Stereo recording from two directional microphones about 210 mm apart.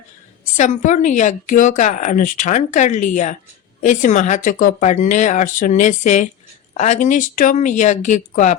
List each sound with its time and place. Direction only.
0.5 s speech: 35° left (ahead or behind)